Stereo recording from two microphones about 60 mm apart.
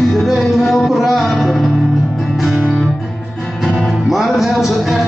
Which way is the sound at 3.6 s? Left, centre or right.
Centre.